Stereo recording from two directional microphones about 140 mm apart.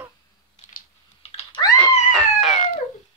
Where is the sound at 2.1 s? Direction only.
Centre (ahead or behind).